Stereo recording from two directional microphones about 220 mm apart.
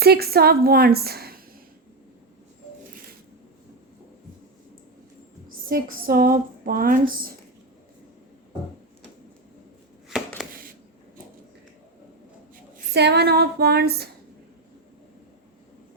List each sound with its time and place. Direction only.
0.0 s a woman's voice: 45° right (ahead or behind)
5.5 s speech: 40° right (ahead or behind)
10.1 s chopping: centre (ahead or behind)
12.7 s a woman's voice: 50° right (ahead or behind)